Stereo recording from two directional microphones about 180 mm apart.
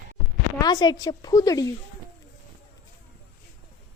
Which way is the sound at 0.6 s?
25° left (ahead or behind).